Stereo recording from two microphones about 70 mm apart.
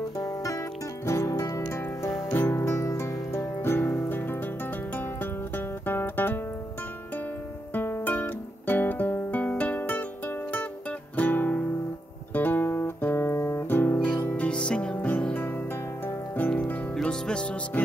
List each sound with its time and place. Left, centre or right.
0.2 s music: left
7.7 s music: left
12.4 s guitar: left
14.3 s music: centre
15.0 s music: left
16.9 s music: centre